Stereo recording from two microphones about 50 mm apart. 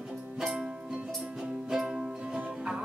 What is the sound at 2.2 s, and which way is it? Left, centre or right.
Music, right.